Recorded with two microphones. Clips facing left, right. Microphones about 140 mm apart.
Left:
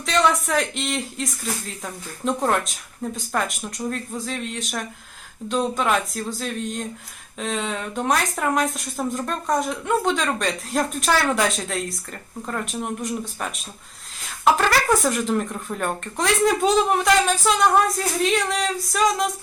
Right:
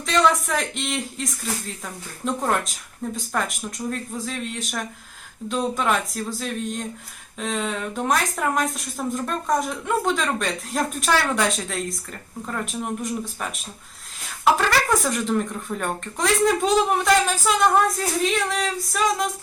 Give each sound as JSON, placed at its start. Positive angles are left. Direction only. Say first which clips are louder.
{"t": 0.0, "sound": "speech", "louder": "even", "side_deg": 0}